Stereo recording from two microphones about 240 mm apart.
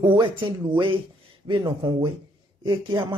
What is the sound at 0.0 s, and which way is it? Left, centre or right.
Speech, centre.